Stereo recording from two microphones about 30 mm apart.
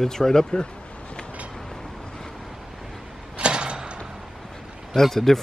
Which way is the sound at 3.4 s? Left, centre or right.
Right.